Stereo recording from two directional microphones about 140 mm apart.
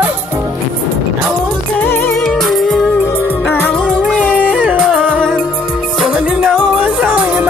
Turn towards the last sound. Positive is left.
turn(degrees=-10)  # may be behind; listen again after turning